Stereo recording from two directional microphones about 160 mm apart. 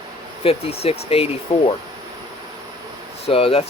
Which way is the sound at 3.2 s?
35° left (ahead or behind).